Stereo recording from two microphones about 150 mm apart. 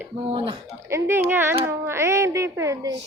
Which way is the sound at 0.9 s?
20° right (ahead or behind).